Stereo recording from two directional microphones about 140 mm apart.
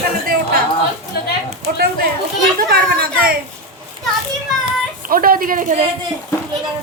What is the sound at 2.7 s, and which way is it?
Speech, 90° right.